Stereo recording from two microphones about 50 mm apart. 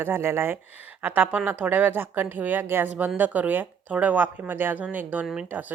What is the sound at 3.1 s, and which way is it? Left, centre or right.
A woman's voice, right.